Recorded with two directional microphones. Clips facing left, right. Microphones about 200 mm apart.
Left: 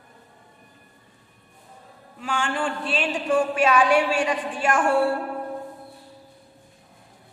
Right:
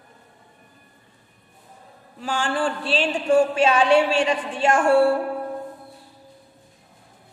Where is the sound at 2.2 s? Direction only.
35° right (ahead or behind).